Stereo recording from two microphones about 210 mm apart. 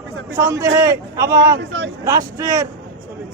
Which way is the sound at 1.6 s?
60° right (ahead or behind).